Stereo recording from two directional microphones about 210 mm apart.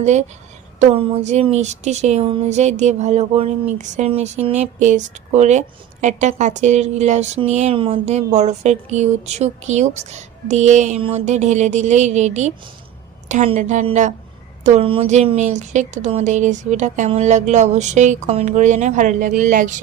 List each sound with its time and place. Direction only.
0.0 s speech: 35° right (ahead or behind)